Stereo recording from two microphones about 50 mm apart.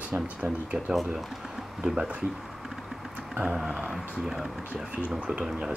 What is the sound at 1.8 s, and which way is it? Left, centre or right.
Speech, centre.